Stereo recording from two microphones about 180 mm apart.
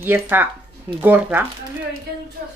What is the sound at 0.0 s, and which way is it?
Speech, 10° right (ahead or behind).